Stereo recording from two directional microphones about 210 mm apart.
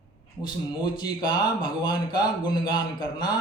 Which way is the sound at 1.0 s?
20° left (ahead or behind).